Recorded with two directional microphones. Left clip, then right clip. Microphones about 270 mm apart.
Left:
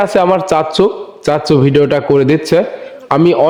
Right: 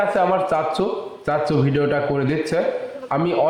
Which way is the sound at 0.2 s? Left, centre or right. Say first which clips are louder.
Left 7 dB; left.